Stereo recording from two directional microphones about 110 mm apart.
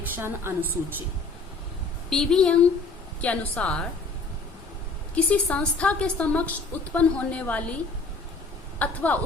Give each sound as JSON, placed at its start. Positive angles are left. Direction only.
{"t": 0.2, "sound": "a woman's voice", "side_deg": -20}
{"t": 2.0, "sound": "a woman's voice", "side_deg": 5}
{"t": 5.1, "sound": "a woman's voice", "side_deg": 10}
{"t": 8.8, "sound": "a woman's voice", "side_deg": 15}